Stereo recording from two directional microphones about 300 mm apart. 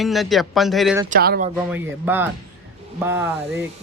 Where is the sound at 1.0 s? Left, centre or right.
Right.